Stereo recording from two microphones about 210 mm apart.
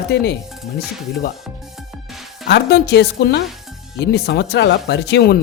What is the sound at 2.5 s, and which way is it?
Speech, 50° left (ahead or behind).